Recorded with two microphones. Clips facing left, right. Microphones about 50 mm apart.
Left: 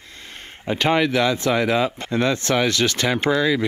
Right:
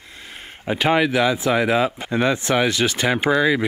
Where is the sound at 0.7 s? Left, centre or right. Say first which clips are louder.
Right 1 dB; centre.